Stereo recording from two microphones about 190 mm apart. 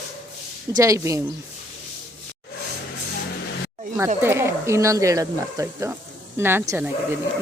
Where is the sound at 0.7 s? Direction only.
15° right (ahead or behind).